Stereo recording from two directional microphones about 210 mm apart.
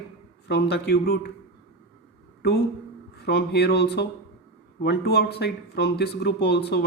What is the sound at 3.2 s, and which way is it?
Speech, 50° left (ahead or behind).